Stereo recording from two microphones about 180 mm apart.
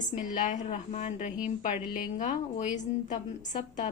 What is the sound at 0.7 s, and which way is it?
A woman's voice, 40° left (ahead or behind).